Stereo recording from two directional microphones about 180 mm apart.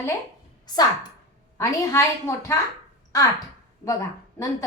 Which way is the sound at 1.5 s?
15° left (ahead or behind).